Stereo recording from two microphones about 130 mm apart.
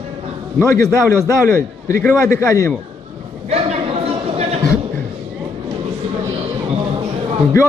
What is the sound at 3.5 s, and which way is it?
Chatter, 55° right (ahead or behind).